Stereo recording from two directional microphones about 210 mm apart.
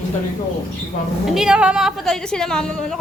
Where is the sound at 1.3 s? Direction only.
5° right (ahead or behind).